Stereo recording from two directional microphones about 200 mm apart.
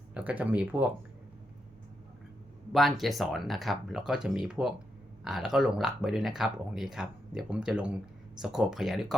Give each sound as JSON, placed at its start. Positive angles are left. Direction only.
{"t": 0.1, "sound": "speech", "side_deg": -5}
{"t": 2.7, "sound": "speech", "side_deg": 0}